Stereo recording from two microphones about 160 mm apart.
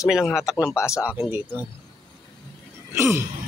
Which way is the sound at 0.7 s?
15° left (ahead or behind).